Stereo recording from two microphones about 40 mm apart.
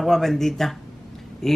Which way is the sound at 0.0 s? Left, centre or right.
Centre.